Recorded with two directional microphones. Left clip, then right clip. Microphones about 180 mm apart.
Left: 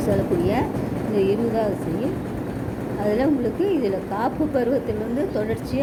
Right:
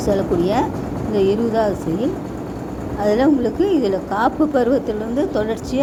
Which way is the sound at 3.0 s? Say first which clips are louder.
Right 5 dB; 25° right (ahead or behind).